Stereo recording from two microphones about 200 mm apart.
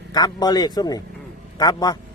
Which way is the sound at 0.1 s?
20° left (ahead or behind).